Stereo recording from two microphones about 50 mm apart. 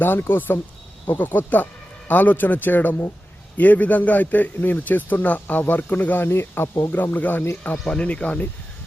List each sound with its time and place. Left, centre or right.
0.0 s speech: left
6.2 s speech: left
7.9 s speech: left